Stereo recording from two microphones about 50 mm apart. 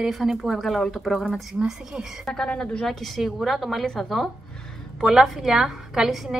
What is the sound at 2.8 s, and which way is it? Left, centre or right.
A woman's voice, centre.